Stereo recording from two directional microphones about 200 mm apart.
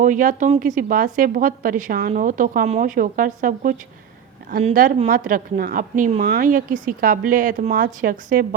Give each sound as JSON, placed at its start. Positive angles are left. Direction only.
{"t": 0.0, "sound": "speech", "side_deg": -40}